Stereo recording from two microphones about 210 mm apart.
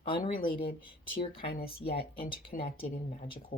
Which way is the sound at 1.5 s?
45° left (ahead or behind).